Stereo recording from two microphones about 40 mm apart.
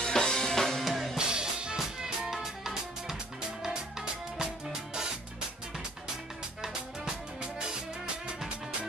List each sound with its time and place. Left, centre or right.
0.0 s drum: centre
0.8 s drum kit: centre
1.1 s music: centre